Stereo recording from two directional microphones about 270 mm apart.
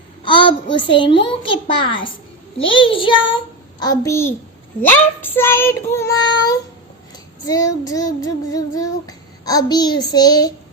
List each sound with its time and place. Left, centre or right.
0.2 s a child's voice: centre
2.6 s child singing: centre